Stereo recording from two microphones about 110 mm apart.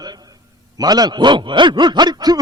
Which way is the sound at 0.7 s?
35° right (ahead or behind).